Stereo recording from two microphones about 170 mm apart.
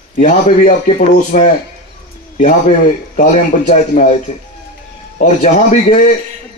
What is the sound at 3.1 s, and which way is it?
Speech, 50° left (ahead or behind).